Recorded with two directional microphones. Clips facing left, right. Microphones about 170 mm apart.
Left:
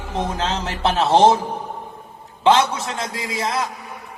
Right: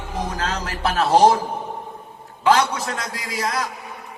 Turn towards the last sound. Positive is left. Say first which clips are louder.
# left 2 dB
turn(degrees=25)  # may be behind; listen again after turning